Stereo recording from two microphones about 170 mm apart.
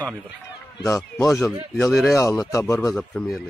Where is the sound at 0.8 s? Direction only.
20° left (ahead or behind).